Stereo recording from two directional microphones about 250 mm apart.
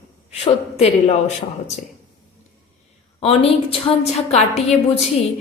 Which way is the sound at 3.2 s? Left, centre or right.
Left.